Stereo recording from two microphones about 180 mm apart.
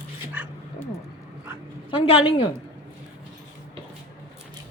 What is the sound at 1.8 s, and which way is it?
Speech, 30° left (ahead or behind).